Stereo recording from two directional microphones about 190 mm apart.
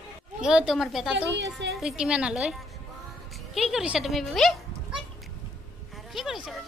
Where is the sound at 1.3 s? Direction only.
65° right (ahead or behind).